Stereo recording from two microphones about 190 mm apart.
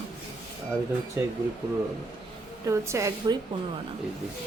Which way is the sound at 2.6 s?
15° right (ahead or behind).